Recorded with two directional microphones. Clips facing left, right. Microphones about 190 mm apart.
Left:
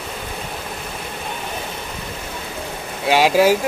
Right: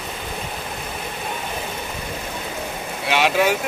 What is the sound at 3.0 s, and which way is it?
Speech, 35° left (ahead or behind).